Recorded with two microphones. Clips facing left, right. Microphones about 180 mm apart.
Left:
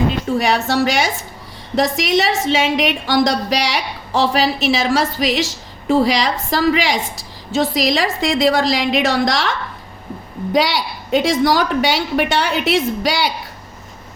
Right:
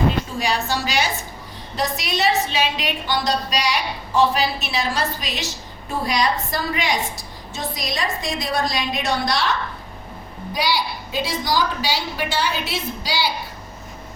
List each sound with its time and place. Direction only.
0.3 s a woman's voice: 65° left (ahead or behind); by 7.0 s 90° left
7.5 s a woman's voice: 80° left